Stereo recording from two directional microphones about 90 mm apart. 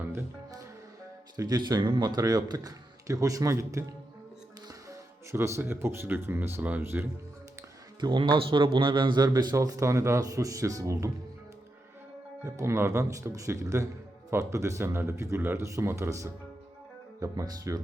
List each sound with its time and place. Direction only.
0.0 s music: 25° right (ahead or behind)
1.4 s a man's voice: 50° right (ahead or behind); by 7.1 s 25° right (ahead or behind)
8.0 s a man's voice: 60° right (ahead or behind); by 11.1 s 35° right (ahead or behind)
12.5 s speech: 30° right (ahead or behind)